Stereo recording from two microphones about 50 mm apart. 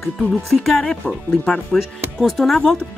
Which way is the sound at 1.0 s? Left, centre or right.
Left.